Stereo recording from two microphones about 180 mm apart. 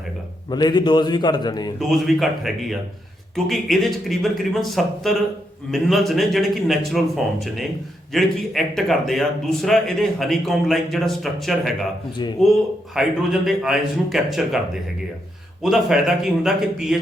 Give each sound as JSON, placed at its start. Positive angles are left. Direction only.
{"t": 0.5, "sound": "a man's voice", "side_deg": 25}
{"t": 1.8, "sound": "a man's voice", "side_deg": 0}
{"t": 12.9, "sound": "a man's voice", "side_deg": 0}
{"t": 15.6, "sound": "a man's voice", "side_deg": 0}